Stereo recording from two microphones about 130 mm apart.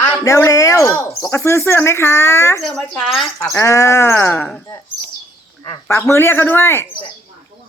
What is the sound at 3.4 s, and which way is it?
A woman's voice, 20° left (ahead or behind).